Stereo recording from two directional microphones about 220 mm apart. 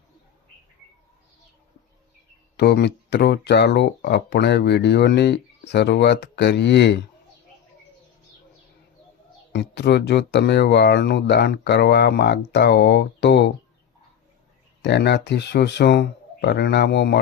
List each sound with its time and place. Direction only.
2.6 s speech: 50° left (ahead or behind)
9.5 s speech: 50° left (ahead or behind)
14.8 s speech: 50° left (ahead or behind)